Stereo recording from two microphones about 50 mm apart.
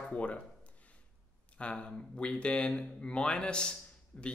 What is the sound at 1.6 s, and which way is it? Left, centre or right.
Speech, left.